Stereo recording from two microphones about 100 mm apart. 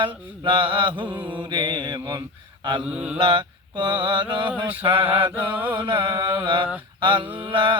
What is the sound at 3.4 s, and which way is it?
Mantra, 50° right (ahead or behind).